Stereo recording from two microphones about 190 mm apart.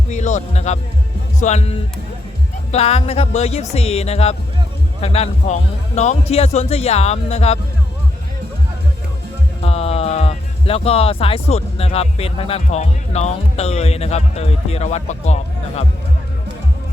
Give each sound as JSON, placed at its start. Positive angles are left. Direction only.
{"t": 0.1, "sound": "speech", "side_deg": 40}
{"t": 9.6, "sound": "speech", "side_deg": 30}